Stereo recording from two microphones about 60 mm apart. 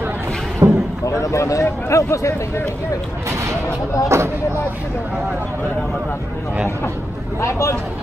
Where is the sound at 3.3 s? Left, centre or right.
Right.